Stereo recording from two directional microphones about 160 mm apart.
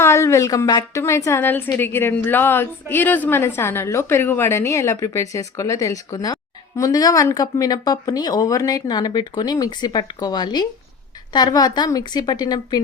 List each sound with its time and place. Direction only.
0.0 s a woman's voice: 15° left (ahead or behind)